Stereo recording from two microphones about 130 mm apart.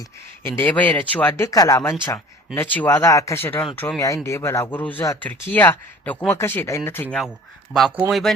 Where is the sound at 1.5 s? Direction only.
25° left (ahead or behind).